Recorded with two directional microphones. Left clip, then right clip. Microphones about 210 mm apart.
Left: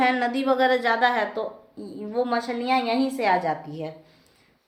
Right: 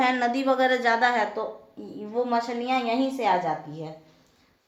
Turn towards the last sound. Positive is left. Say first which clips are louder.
# left 2 dB
turn(degrees=30)  # may be behind; listen again after turning